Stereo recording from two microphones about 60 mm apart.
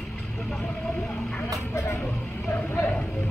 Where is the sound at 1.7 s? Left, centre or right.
Left.